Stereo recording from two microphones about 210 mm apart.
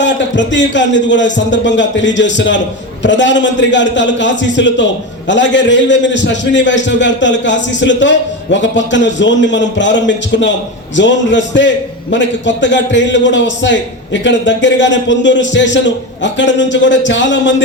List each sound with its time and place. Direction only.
0.0 s a man's voice: 60° left (ahead or behind)